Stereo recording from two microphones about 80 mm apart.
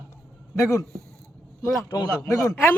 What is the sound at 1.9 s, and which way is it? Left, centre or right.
Speech, left.